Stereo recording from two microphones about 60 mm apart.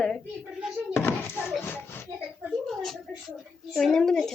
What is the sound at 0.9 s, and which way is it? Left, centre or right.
Speech, left.